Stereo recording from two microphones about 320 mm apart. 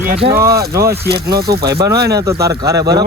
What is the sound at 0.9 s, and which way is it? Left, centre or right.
Speech, right.